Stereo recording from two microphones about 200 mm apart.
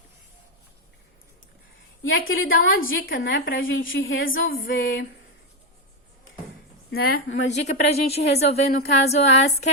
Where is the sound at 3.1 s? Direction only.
70° left (ahead or behind).